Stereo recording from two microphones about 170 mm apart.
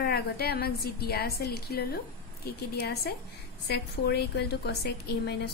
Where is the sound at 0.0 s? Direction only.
65° left (ahead or behind).